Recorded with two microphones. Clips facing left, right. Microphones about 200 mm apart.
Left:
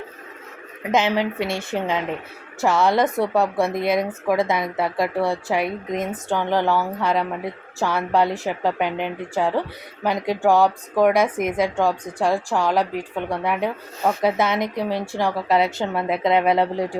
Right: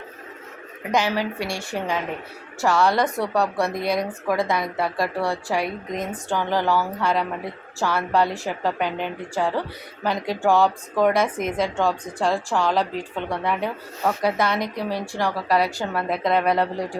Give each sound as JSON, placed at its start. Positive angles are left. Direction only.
{"t": 0.9, "sound": "a woman's voice", "side_deg": 20}